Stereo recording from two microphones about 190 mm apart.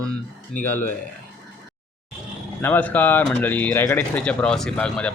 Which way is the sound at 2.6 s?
10° left (ahead or behind).